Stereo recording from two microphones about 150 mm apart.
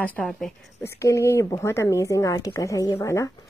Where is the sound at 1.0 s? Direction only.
20° left (ahead or behind).